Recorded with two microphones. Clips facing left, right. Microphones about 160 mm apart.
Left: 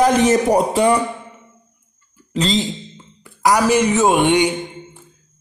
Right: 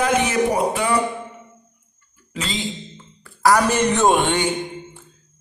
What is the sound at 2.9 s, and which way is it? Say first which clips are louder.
Speech: left 1 dB; 15° left (ahead or behind).